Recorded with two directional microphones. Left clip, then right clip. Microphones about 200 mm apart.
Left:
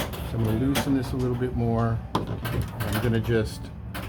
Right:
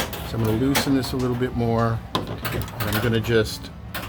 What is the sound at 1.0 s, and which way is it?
Speech, 30° right (ahead or behind).